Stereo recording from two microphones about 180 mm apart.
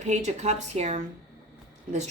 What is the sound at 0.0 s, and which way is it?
Speech, 40° right (ahead or behind).